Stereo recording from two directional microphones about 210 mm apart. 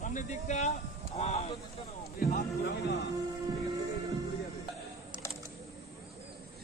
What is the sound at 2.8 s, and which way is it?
Speech, 55° left (ahead or behind).